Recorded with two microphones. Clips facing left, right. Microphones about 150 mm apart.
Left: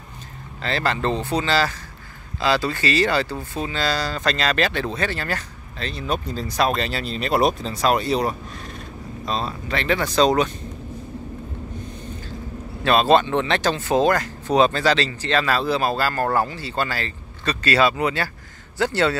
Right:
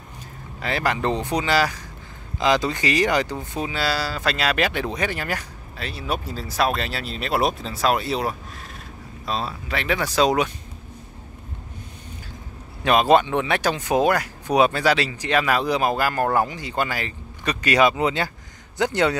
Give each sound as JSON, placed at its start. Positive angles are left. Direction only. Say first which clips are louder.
{"t": 0.6, "sound": "speech", "louder": "even", "side_deg": -10}
{"t": 12.8, "sound": "speech", "louder": "even", "side_deg": -15}